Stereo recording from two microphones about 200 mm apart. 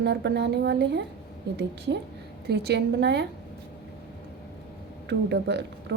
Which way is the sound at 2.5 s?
55° right (ahead or behind).